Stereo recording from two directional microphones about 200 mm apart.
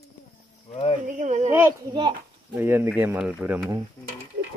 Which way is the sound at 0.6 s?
25° left (ahead or behind).